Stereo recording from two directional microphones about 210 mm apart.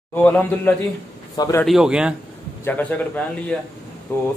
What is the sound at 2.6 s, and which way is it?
A man's voice, 10° left (ahead or behind).